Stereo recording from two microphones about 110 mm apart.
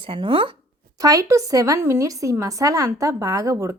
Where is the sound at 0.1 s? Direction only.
50° right (ahead or behind).